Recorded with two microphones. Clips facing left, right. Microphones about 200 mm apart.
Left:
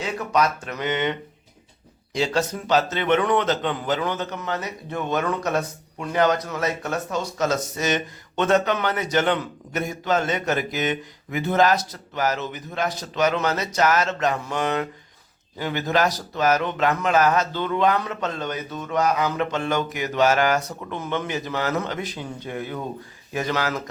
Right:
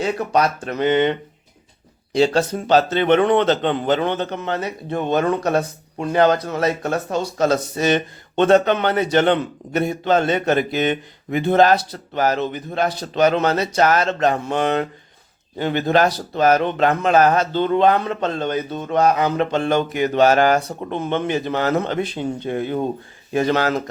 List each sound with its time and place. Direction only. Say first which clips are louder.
0.0 s speech: right 4 dB; 35° right (ahead or behind)
2.1 s speech: right 6 dB; 30° right (ahead or behind)